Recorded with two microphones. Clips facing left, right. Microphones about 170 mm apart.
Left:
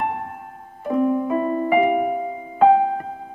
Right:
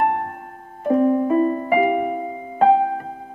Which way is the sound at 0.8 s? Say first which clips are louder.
Right 3 dB; 45° right (ahead or behind).